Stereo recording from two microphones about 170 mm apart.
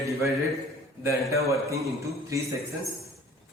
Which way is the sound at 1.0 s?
15° right (ahead or behind).